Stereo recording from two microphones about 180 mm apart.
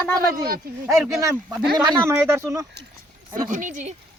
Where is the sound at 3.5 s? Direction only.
45° right (ahead or behind).